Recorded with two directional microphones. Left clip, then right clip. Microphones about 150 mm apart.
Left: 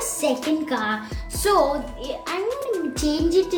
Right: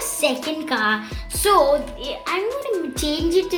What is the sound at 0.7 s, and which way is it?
Music, 20° right (ahead or behind).